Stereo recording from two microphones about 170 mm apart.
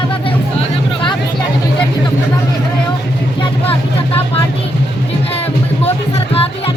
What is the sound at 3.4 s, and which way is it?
Vehicle, 35° left (ahead or behind).